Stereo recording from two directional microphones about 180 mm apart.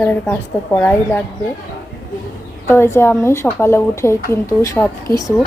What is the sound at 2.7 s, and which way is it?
Speech, 15° left (ahead or behind).